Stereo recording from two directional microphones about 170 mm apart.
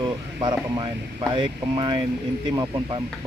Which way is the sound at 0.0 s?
25° right (ahead or behind).